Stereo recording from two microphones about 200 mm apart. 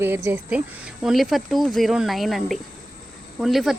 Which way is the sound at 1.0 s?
Centre (ahead or behind).